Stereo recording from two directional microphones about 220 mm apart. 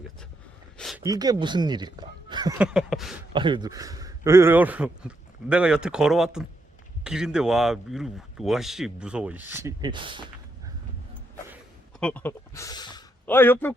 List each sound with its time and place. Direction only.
0.8 s a sound: centre (ahead or behind)
1.0 s speech: 15° right (ahead or behind)
2.6 s speech: centre (ahead or behind)
3.3 s speech: 20° right (ahead or behind)
11.9 s a man's voice: 5° left (ahead or behind)